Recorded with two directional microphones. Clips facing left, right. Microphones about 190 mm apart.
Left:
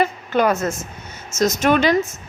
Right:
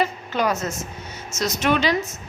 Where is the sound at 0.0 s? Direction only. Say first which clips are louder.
Left 4 dB; 55° left (ahead or behind).